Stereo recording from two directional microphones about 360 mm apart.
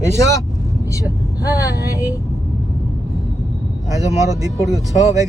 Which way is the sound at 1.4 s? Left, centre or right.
Centre.